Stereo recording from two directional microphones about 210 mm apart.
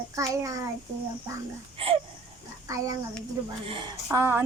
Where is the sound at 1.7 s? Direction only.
25° right (ahead or behind).